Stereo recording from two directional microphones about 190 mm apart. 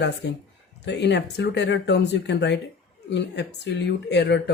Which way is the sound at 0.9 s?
65° left (ahead or behind).